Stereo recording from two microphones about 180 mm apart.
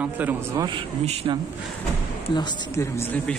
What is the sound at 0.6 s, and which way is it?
Speech, 25° right (ahead or behind).